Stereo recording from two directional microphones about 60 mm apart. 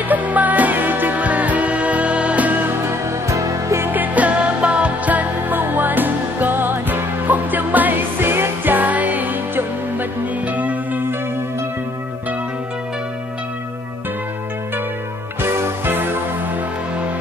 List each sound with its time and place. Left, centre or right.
0.1 s music: right
3.1 s music: right
3.8 s music: right
15.4 s music: right